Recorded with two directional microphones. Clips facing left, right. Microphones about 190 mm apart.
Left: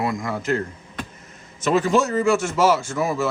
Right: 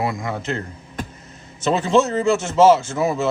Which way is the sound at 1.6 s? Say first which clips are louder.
Right 1 dB; 30° right (ahead or behind).